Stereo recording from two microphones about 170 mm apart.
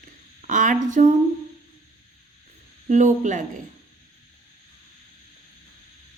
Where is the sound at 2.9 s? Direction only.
45° right (ahead or behind).